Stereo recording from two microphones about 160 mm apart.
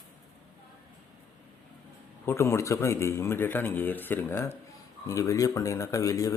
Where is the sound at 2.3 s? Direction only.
15° left (ahead or behind).